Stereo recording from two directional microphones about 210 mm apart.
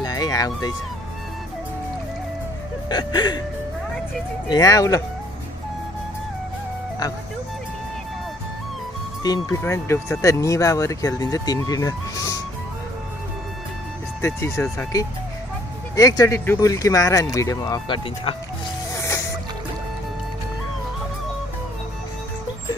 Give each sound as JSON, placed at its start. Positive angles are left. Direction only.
{"t": 0.0, "sound": "a sound", "side_deg": 20}
{"t": 2.9, "sound": "music", "side_deg": 20}
{"t": 4.5, "sound": "speech", "side_deg": 15}
{"t": 9.2, "sound": "speech", "side_deg": 15}
{"t": 14.2, "sound": "speech", "side_deg": 10}
{"t": 18.9, "sound": "music", "side_deg": 15}